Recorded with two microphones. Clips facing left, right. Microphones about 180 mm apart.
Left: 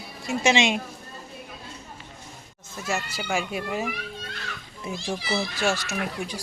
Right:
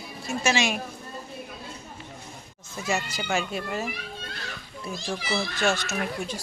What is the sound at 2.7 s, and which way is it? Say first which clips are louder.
A woman's voice: right 1 dB; centre (ahead or behind).